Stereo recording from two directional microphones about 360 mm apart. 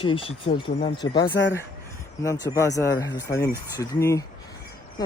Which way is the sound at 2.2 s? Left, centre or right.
Centre.